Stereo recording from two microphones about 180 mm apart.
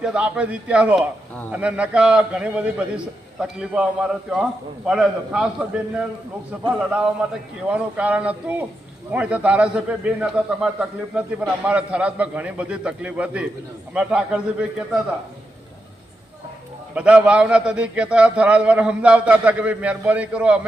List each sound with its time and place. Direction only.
0.0 s a man's voice: 5° right (ahead or behind)
6.7 s a man's voice: 5° right (ahead or behind)
16.9 s a man's voice: 5° right (ahead or behind)